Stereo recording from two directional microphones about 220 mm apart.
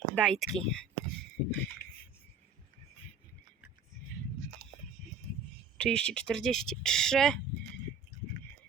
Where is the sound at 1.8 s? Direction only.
35° left (ahead or behind).